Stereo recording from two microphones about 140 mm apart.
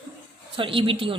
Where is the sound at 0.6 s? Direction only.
40° right (ahead or behind).